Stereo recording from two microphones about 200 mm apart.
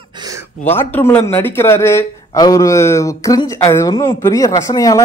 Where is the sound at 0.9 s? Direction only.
10° left (ahead or behind).